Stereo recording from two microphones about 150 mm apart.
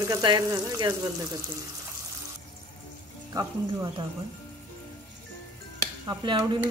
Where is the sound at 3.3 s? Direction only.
25° right (ahead or behind).